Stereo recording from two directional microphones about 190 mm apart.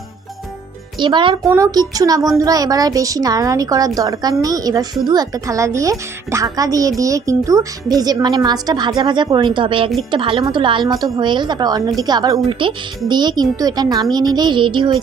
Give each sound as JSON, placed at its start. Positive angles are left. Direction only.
{"t": 0.9, "sound": "a woman's voice", "side_deg": -25}